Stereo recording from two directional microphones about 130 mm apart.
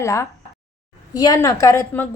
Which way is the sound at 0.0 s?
25° left (ahead or behind).